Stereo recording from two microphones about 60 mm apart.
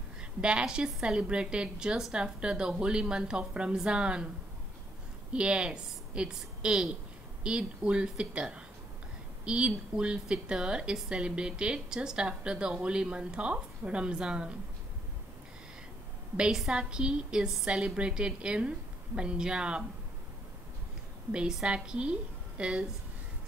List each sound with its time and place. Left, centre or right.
0.2 s a woman's voice: centre
5.3 s a woman's voice: centre
16.3 s a woman's voice: centre
21.3 s a woman's voice: centre